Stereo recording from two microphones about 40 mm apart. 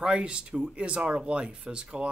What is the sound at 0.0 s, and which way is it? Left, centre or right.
Speech, right.